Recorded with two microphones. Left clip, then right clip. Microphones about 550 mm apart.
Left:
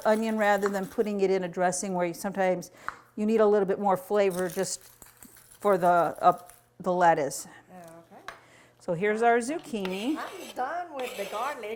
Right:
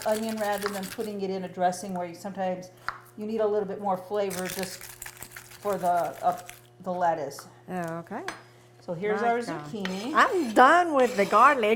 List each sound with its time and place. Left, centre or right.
0.0 s speech: left
7.7 s a woman's voice: right
8.9 s speech: left
10.2 s a woman's voice: right
11.3 s a sound: right